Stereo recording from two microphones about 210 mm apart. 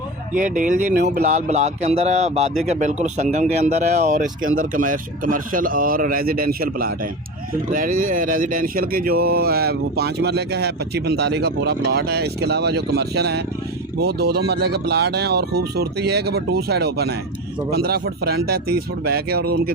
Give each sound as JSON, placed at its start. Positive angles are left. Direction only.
{"t": 0.3, "sound": "speech", "side_deg": -40}